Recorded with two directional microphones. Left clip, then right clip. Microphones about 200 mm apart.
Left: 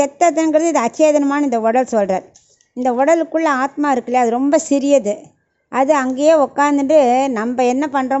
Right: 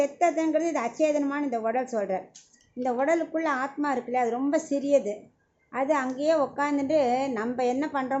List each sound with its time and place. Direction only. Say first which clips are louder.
0.0 s a woman's voice: left 10 dB; 55° left (ahead or behind)